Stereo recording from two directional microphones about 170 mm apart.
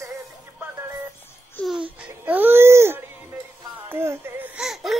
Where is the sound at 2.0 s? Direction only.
10° right (ahead or behind).